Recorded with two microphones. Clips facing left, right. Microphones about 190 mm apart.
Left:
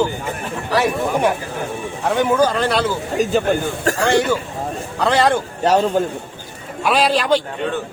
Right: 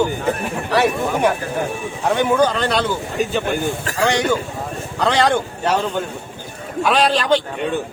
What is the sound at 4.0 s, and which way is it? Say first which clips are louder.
A man's voice: even; 5° left (ahead or behind).